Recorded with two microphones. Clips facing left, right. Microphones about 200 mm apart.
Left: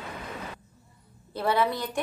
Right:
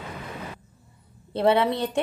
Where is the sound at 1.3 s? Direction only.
25° right (ahead or behind).